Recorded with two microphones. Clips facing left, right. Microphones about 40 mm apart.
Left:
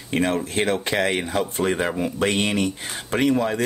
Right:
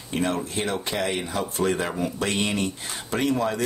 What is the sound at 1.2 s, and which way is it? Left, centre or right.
Speech, left.